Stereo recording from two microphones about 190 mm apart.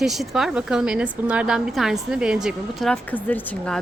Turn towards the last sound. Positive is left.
turn(degrees=10)  # may be behind; listen again after turning